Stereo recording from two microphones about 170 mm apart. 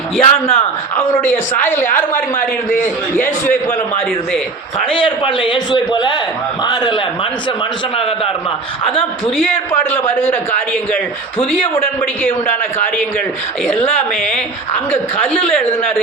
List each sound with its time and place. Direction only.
0.2 s a man's voice: 15° left (ahead or behind)
1.9 s a man's voice: 50° left (ahead or behind)
3.4 s a man's voice: 10° left (ahead or behind)
4.9 s a man's voice: 30° left (ahead or behind)
8.8 s a man's voice: 30° left (ahead or behind)
9.4 s a man's voice: 10° left (ahead or behind)
14.8 s a man's voice: 10° left (ahead or behind)